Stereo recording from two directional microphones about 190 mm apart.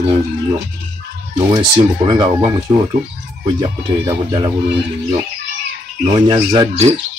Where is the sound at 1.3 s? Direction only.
25° right (ahead or behind).